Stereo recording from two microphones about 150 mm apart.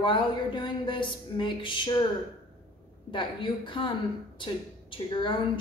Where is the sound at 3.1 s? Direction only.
35° left (ahead or behind).